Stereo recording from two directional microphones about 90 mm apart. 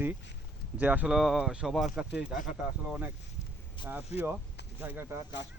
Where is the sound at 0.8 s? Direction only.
15° right (ahead or behind).